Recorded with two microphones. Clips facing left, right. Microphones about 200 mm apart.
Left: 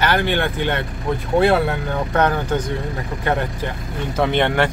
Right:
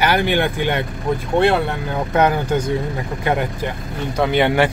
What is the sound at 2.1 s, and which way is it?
Speech, 10° right (ahead or behind).